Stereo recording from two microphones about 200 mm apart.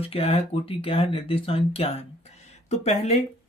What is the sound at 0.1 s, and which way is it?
Speech, 30° left (ahead or behind).